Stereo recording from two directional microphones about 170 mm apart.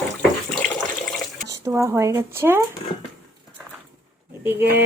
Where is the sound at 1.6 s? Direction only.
15° right (ahead or behind).